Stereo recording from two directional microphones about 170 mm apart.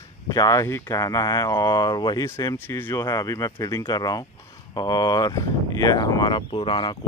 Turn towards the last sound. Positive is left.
turn(degrees=30)  # may be behind; listen again after turning